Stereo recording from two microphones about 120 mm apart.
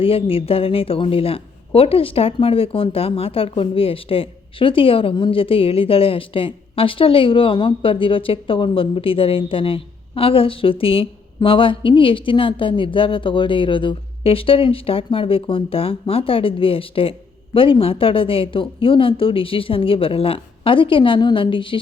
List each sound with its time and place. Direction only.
0.0 s speech: 50° left (ahead or behind)